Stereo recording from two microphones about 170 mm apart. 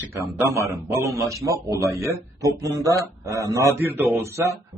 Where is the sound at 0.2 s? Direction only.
15° right (ahead or behind).